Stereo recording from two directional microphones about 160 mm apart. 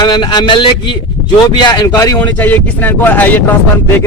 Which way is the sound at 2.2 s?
10° left (ahead or behind).